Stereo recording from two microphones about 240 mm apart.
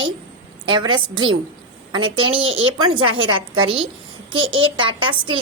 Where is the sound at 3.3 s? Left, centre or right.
Centre.